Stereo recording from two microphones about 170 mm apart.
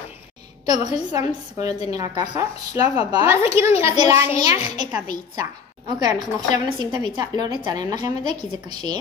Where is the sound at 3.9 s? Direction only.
20° right (ahead or behind).